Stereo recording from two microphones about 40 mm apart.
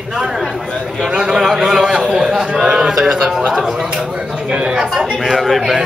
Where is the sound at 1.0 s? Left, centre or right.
Right.